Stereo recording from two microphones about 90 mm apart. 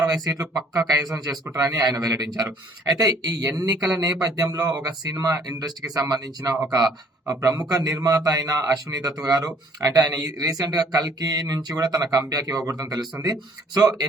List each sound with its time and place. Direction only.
0.0 s a man's voice: 45° right (ahead or behind)